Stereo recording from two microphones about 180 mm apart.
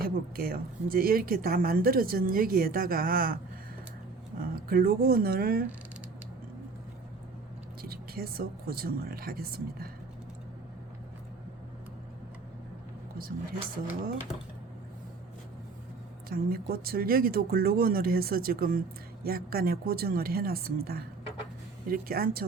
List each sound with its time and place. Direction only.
0.0 s speech: 55° right (ahead or behind)
4.4 s speech: 55° right (ahead or behind)
7.8 s speech: 55° right (ahead or behind)
13.1 s speech: 55° right (ahead or behind)
16.3 s speech: 55° right (ahead or behind)